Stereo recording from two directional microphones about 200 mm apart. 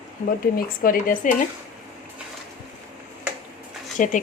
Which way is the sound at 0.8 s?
45° left (ahead or behind).